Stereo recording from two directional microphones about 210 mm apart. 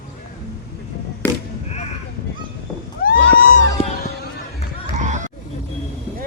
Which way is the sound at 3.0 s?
45° left (ahead or behind).